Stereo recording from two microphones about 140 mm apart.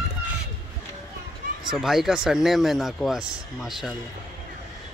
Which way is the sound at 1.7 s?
Centre (ahead or behind).